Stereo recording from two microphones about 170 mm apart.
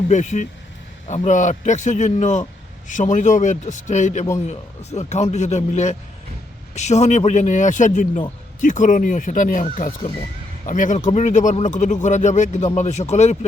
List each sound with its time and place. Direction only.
0.1 s speech: 45° left (ahead or behind)